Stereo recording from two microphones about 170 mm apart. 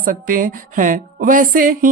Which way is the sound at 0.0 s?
50° right (ahead or behind).